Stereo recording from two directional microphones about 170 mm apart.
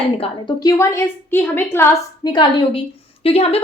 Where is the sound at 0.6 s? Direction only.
15° left (ahead or behind).